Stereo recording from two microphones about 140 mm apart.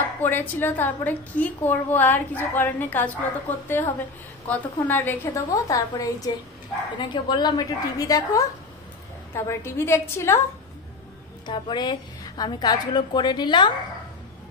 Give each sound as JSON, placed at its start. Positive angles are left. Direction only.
{"t": 0.2, "sound": "a woman's voice", "side_deg": 15}
{"t": 11.4, "sound": "a woman's voice", "side_deg": 35}